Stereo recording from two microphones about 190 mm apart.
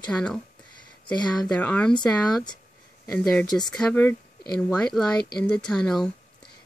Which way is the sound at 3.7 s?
5° left (ahead or behind).